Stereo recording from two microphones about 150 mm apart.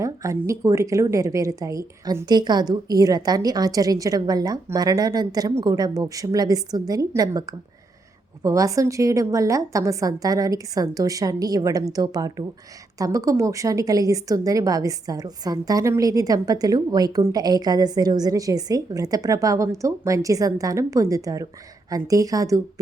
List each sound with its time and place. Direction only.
0.0 s a woman's voice: 20° right (ahead or behind)